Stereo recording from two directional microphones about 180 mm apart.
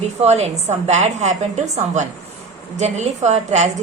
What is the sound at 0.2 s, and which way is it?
A woman's voice, 35° right (ahead or behind).